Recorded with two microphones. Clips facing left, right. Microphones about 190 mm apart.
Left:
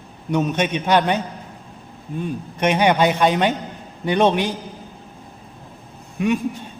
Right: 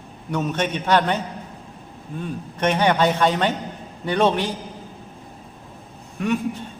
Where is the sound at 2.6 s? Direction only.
15° left (ahead or behind).